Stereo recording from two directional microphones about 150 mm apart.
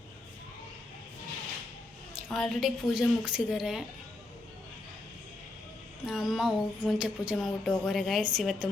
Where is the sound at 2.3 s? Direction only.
Centre (ahead or behind).